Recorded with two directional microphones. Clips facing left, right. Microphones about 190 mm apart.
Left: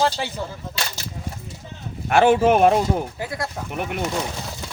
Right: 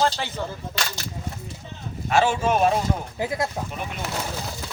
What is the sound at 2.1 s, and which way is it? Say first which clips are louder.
Speech: left 5 dB; 60° left (ahead or behind).